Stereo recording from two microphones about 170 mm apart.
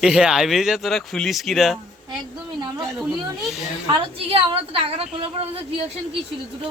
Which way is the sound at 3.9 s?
35° right (ahead or behind).